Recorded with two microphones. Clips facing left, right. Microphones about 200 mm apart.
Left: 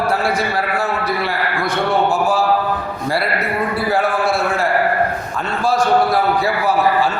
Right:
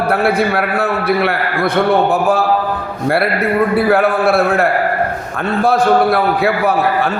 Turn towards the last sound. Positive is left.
turn(degrees=-60)  # may be behind; listen again after turning